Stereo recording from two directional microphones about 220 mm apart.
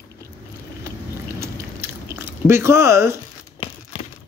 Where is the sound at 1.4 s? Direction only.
10° right (ahead or behind).